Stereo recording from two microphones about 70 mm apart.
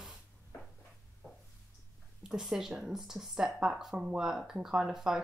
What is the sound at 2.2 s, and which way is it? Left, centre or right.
Speech, centre.